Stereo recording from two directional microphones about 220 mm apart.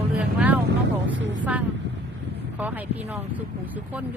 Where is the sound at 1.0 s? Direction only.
55° right (ahead or behind).